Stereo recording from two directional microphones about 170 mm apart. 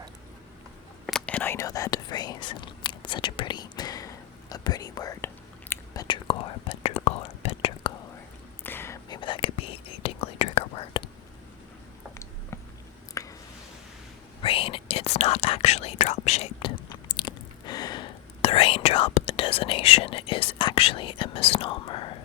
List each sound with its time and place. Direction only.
1.0 s whispering: 5° left (ahead or behind); by 7.9 s 35° left (ahead or behind)
8.6 s whispering: 15° left (ahead or behind)
9.0 s whispering: 25° left (ahead or behind)
13.2 s a sound: 20° left (ahead or behind)
14.4 s whispering: 30° left (ahead or behind)